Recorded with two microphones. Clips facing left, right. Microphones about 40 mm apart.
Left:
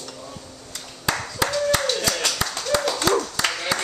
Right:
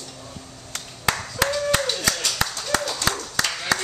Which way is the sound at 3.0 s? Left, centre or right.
Left.